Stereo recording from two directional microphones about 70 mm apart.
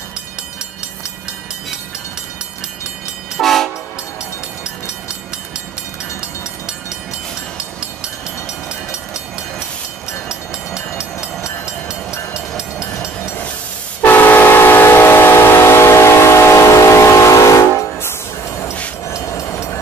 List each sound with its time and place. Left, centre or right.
3.3 s train: centre
10.2 s train: centre
11.4 s train: left
14.0 s train: left